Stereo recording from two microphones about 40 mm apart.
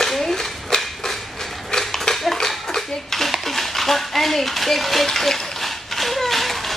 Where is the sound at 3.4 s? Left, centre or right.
Centre.